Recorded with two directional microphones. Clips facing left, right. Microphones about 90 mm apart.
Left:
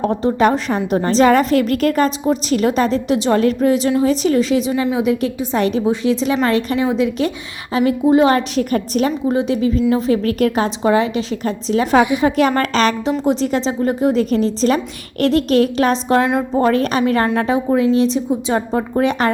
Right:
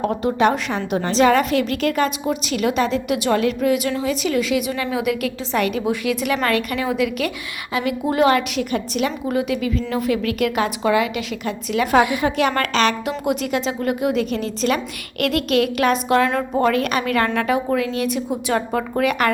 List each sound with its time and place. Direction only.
0.0 s a woman's voice: 30° left (ahead or behind)